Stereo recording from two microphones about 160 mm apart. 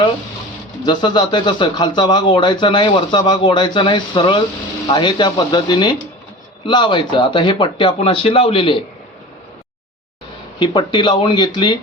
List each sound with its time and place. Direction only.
0.9 s speech: 30° left (ahead or behind)
10.6 s speech: 30° left (ahead or behind)